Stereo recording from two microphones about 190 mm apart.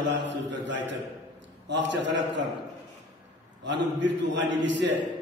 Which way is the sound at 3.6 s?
70° right (ahead or behind).